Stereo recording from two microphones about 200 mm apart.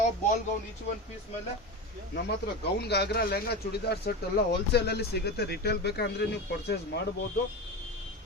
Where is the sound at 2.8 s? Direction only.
55° left (ahead or behind).